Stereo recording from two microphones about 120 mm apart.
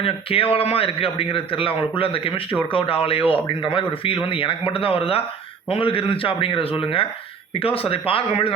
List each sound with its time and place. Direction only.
0.0 s a man's voice: 50° left (ahead or behind)